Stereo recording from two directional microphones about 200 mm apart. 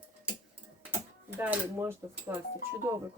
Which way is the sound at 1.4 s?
10° right (ahead or behind).